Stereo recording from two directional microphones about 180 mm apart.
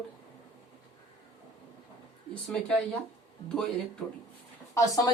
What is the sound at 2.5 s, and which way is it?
Speech, 5° left (ahead or behind).